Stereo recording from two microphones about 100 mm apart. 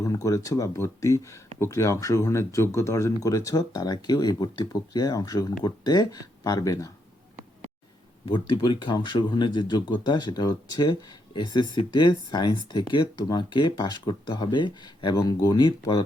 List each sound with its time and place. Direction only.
0.0 s speech: 35° left (ahead or behind)
8.3 s speech: 55° left (ahead or behind)